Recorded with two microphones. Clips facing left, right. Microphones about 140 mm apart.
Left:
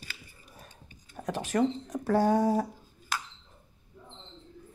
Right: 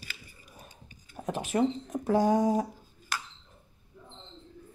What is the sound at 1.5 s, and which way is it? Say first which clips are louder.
Speech: even; 85° left.